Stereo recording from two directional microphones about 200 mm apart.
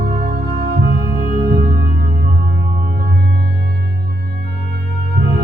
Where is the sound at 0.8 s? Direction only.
50° right (ahead or behind).